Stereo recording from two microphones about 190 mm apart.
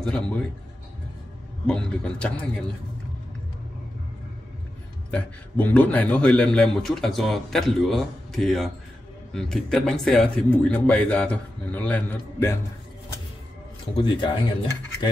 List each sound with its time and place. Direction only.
0.0 s a man's voice: 5° left (ahead or behind)
1.7 s a man's voice: 5° left (ahead or behind)
5.1 s a man's voice: 10° left (ahead or behind)
13.9 s speech: 25° left (ahead or behind)